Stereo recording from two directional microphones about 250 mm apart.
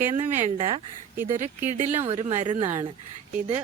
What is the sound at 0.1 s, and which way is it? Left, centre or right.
Speech, right.